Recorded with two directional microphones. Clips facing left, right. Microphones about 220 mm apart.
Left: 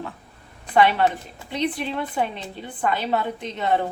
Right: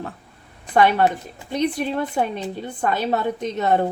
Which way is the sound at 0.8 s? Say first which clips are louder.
Right 2 dB; 45° right (ahead or behind).